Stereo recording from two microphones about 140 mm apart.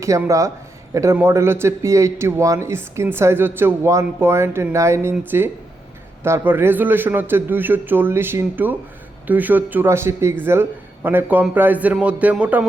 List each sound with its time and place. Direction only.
0.3 s a man's voice: 20° right (ahead or behind)